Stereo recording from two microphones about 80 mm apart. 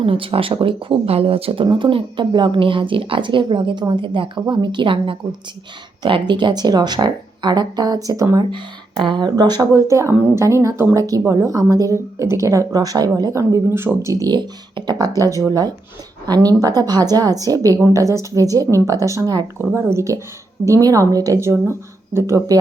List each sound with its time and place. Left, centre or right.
0.2 s speech: right
1.5 s speech: right
9.0 s speech: right
9.3 s speech: right
9.7 s speech: right
10.2 s a woman's voice: right
10.4 s a woman's voice: right
13.3 s speech: right
14.1 s a woman's voice: right
14.3 s a woman's voice: right
19.2 s speech: right
19.9 s a woman's voice: right
21.5 s speech: right